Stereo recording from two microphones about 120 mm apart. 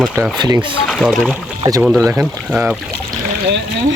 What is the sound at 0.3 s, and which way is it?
Speech, 35° right (ahead or behind).